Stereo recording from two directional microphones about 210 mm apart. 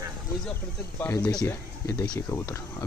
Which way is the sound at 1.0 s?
10° left (ahead or behind).